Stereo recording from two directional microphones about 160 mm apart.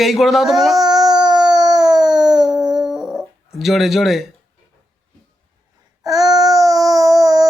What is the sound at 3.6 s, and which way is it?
Speech, centre (ahead or behind).